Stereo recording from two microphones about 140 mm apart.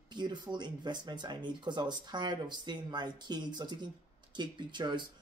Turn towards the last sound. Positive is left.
turn(degrees=-35)  # may be behind; listen again after turning